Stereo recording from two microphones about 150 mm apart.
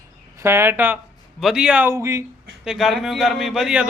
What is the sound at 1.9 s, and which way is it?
Speech, 20° right (ahead or behind).